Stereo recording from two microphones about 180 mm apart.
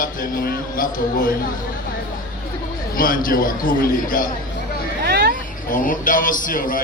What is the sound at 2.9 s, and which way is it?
A man's voice, 50° left (ahead or behind).